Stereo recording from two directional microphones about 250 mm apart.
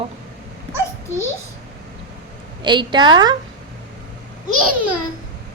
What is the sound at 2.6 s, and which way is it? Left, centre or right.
Speech, centre.